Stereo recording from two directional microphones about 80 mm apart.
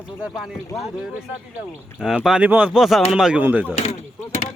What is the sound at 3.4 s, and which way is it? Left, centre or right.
Speech, right.